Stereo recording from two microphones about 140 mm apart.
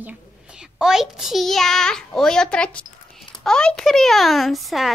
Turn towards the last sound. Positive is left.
turn(degrees=0)  # may be behind; listen again after turning